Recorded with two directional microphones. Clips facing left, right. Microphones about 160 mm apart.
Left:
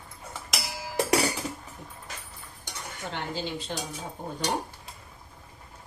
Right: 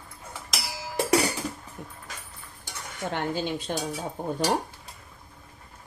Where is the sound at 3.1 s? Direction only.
55° right (ahead or behind).